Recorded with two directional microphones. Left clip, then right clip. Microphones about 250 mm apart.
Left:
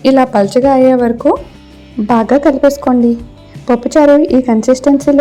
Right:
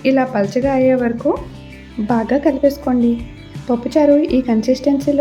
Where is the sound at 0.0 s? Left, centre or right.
Left.